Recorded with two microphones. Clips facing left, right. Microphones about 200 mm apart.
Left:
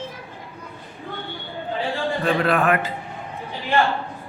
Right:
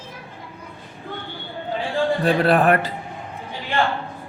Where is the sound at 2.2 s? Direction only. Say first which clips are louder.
Right 2 dB; 35° right (ahead or behind).